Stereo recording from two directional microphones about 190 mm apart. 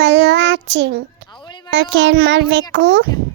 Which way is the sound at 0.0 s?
65° right (ahead or behind).